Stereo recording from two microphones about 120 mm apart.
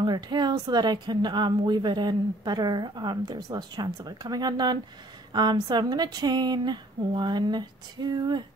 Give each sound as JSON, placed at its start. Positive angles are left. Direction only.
{"t": 0.0, "sound": "a woman's voice", "side_deg": -35}